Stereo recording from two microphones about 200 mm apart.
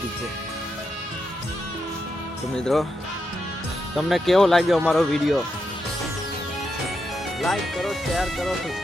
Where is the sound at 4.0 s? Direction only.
Centre (ahead or behind).